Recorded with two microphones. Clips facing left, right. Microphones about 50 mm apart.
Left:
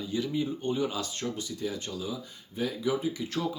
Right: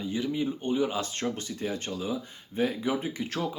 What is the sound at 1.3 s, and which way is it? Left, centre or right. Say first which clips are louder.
Speech: right 1 dB; right.